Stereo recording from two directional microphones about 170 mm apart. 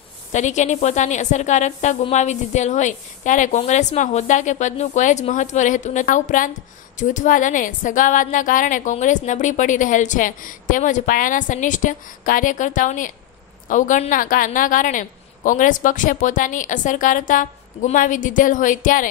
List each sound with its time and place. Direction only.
0.3 s a woman's voice: 45° left (ahead or behind)